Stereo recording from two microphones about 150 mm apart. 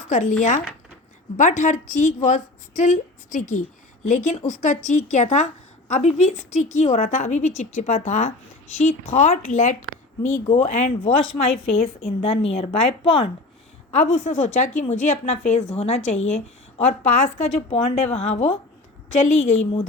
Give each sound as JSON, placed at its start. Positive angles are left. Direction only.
{"t": 0.1, "sound": "a woman's voice", "side_deg": 55}
{"t": 1.4, "sound": "a woman's voice", "side_deg": 55}
{"t": 10.2, "sound": "speech", "side_deg": 15}
{"t": 10.5, "sound": "a woman's voice", "side_deg": 50}
{"t": 13.9, "sound": "a woman's voice", "side_deg": 50}